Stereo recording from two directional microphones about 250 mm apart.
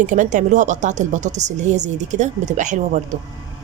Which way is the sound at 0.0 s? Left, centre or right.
Right.